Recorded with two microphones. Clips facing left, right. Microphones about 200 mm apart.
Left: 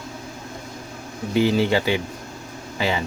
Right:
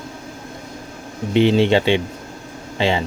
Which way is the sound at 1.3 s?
25° right (ahead or behind).